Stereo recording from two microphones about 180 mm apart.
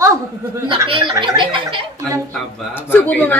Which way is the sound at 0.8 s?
25° right (ahead or behind).